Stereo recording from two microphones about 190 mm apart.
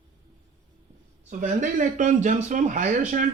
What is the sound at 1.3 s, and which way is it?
A man's voice, 45° right (ahead or behind).